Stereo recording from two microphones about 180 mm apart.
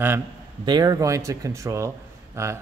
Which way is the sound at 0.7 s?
20° right (ahead or behind).